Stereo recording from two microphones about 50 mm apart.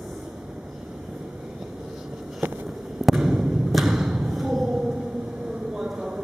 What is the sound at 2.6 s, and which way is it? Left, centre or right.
Thump, centre.